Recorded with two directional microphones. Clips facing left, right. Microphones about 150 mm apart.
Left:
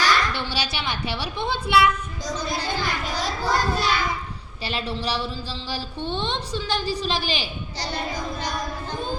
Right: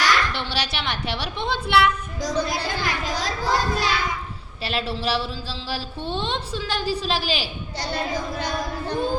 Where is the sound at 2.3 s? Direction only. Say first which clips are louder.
Right 2 dB; 75° right (ahead or behind).